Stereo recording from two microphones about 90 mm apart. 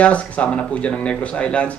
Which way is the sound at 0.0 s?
15° left (ahead or behind).